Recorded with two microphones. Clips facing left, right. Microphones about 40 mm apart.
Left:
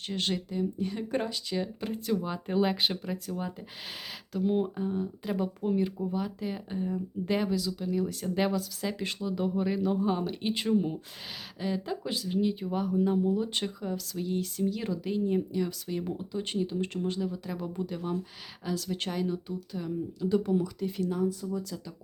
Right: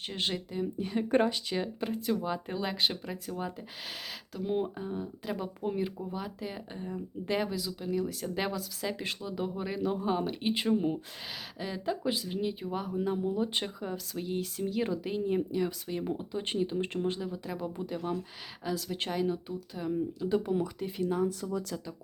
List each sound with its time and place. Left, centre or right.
0.1 s speech: centre
1.0 s speech: right
2.0 s speech: centre
2.5 s speech: centre
7.9 s speech: centre
17.2 s speech: centre
21.4 s speech: right